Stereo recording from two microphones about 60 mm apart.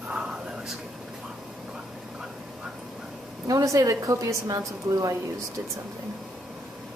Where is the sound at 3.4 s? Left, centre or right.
Right.